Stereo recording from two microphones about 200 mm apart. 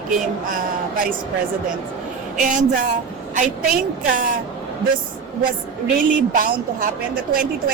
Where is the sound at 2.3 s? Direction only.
40° right (ahead or behind).